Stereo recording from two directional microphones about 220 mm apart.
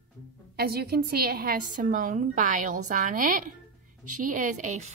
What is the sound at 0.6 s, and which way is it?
A woman's voice, 45° right (ahead or behind).